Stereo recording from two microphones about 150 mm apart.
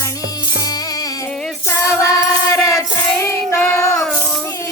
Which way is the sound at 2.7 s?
20° left (ahead or behind).